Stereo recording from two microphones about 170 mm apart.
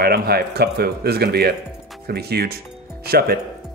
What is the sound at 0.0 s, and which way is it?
Speech, 65° right (ahead or behind).